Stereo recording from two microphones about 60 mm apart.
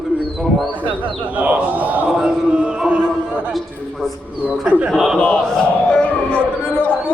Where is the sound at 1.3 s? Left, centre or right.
Right.